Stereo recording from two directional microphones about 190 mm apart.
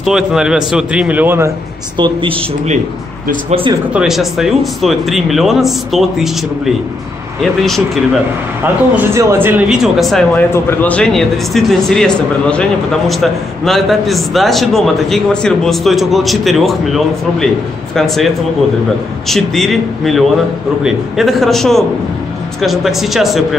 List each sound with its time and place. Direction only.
0.0 s a man's voice: centre (ahead or behind)
2.0 s speech: 25° right (ahead or behind)
3.9 s a man's voice: 5° right (ahead or behind)
8.9 s speech: 15° right (ahead or behind)
9.9 s a man's voice: centre (ahead or behind)